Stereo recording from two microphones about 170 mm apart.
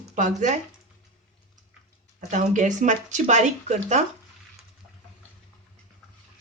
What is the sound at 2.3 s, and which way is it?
Speech, 45° right (ahead or behind).